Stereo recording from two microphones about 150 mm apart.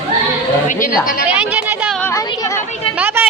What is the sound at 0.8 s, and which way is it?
Speech, 65° left (ahead or behind).